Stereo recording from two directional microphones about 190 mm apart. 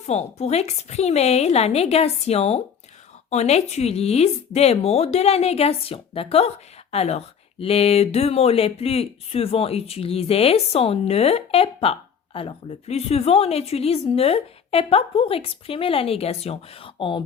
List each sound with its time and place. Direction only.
0.0 s speech: 35° left (ahead or behind)